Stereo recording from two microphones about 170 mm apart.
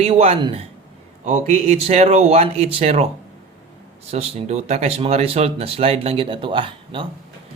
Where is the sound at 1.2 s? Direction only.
45° right (ahead or behind).